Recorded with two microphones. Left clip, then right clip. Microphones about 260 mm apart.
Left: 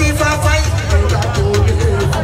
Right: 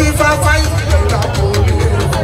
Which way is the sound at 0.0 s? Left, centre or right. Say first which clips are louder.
Right 3 dB; centre.